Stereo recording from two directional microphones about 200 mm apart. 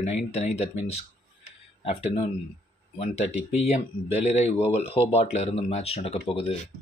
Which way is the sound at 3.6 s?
35° left (ahead or behind).